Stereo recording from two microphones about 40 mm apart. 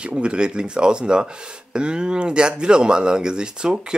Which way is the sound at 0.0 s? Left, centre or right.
Right.